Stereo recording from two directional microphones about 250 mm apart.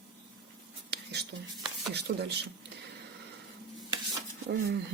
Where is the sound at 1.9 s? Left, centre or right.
Right.